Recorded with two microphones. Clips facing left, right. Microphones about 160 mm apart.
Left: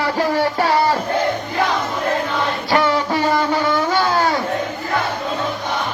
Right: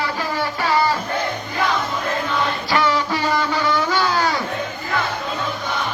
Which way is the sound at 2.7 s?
50° left (ahead or behind).